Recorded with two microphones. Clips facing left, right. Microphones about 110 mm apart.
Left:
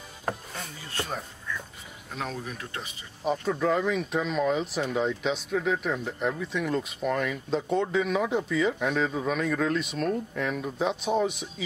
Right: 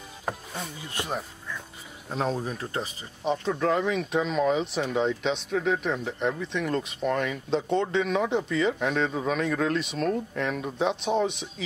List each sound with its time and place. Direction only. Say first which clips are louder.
0.2 s a sound: even; centre (ahead or behind)
0.9 s speech: right 1 dB; 15° right (ahead or behind)
2.0 s speech: right 6 dB; 30° right (ahead or behind)
3.3 s speech: even; 5° left (ahead or behind)